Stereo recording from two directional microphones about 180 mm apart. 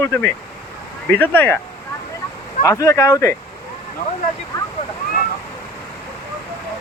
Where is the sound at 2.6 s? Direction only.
15° left (ahead or behind).